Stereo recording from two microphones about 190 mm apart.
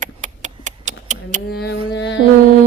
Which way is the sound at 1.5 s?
55° left (ahead or behind).